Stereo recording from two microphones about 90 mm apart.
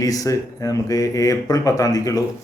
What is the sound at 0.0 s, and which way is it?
Speech, 40° left (ahead or behind).